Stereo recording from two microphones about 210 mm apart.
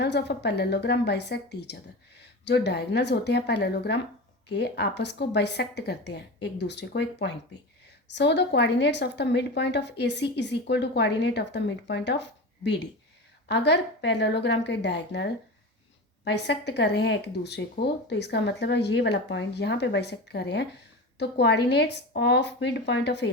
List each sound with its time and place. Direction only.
0.0 s a woman's voice: 55° left (ahead or behind)